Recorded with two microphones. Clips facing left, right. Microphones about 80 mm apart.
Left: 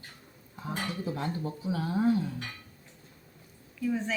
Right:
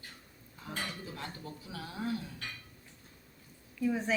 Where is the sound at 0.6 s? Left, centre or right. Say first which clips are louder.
Left 7 dB; left.